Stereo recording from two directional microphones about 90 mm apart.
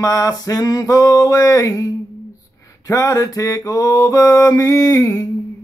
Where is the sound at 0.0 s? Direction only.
40° left (ahead or behind).